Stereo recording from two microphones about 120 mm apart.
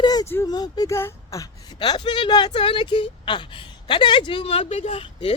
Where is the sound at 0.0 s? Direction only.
35° left (ahead or behind).